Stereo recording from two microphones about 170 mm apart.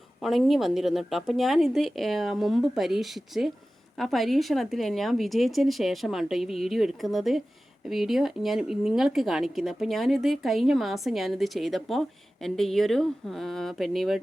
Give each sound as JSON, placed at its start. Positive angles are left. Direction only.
{"t": 0.2, "sound": "speech", "side_deg": 0}